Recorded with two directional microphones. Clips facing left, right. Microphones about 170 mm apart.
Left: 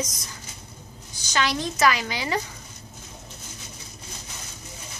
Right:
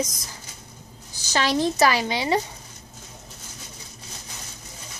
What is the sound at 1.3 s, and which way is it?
A woman's voice, 35° right (ahead or behind).